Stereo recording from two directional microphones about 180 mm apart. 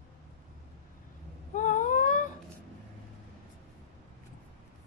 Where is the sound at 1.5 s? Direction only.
45° left (ahead or behind).